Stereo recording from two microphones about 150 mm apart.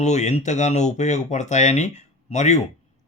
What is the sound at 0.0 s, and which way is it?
A man's voice, 50° left (ahead or behind).